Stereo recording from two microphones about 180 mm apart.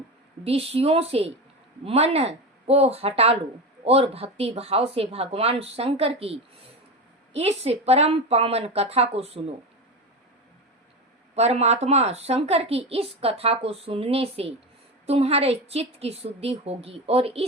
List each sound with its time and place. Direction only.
0.4 s a woman's voice: 35° right (ahead or behind)
11.3 s a woman's voice: 35° right (ahead or behind)